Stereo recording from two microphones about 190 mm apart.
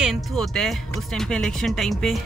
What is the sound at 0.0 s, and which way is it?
Speech, centre (ahead or behind).